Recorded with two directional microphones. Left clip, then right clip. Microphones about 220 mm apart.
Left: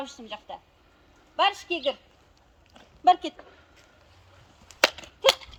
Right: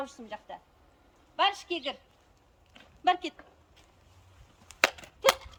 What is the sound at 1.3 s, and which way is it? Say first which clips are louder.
Speech: left 3 dB; 20° left (ahead or behind).